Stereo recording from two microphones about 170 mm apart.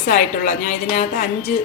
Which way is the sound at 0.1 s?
55° left (ahead or behind).